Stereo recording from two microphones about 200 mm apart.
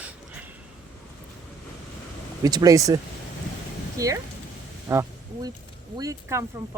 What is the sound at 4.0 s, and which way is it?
Speech, 15° right (ahead or behind).